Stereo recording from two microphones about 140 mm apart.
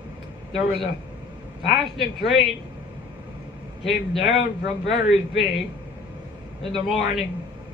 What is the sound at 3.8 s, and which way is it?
A man's voice, centre (ahead or behind).